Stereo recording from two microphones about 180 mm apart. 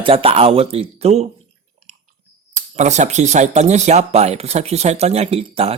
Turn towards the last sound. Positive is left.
turn(degrees=-35)  # may be behind; listen again after turning